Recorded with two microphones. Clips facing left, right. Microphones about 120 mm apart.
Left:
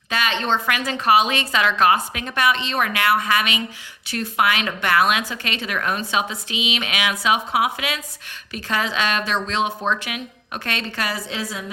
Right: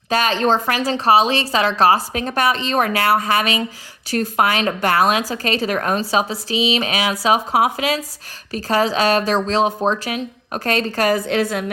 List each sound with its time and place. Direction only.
0.1 s a woman's voice: 40° right (ahead or behind); by 11.6 s 60° right (ahead or behind)